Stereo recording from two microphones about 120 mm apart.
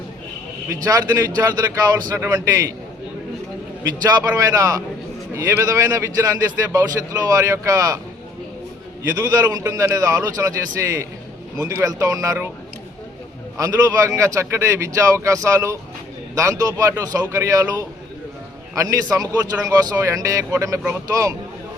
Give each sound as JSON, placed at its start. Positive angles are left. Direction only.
{"t": 0.7, "sound": "a man's voice", "side_deg": -30}
{"t": 3.8, "sound": "a man's voice", "side_deg": -30}
{"t": 9.1, "sound": "a man's voice", "side_deg": -30}
{"t": 13.6, "sound": "a man's voice", "side_deg": -30}